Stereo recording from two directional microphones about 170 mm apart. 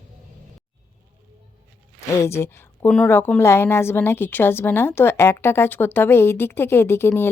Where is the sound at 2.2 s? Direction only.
15° left (ahead or behind).